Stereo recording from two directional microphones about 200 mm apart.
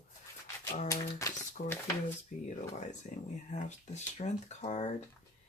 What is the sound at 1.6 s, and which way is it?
Speech, 40° left (ahead or behind).